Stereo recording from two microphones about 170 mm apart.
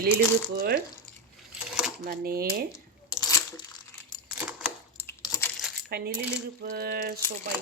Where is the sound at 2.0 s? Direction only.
65° right (ahead or behind).